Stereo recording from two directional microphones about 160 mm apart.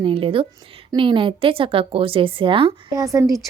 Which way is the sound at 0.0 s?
35° right (ahead or behind).